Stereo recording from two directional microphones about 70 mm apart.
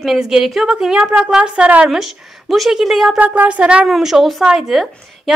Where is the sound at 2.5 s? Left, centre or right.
Centre.